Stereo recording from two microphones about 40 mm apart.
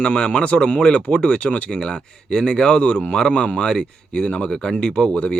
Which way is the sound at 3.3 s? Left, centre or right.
Left.